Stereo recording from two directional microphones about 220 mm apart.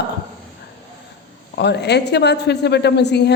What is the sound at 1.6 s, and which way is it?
Speech, 50° left (ahead or behind).